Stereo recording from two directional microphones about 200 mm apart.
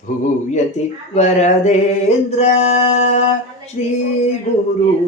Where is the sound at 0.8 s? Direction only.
35° left (ahead or behind).